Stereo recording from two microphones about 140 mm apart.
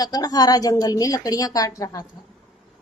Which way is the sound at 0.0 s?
25° left (ahead or behind).